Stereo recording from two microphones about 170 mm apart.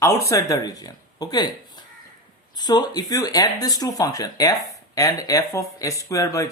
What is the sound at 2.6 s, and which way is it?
Speech, 25° left (ahead or behind).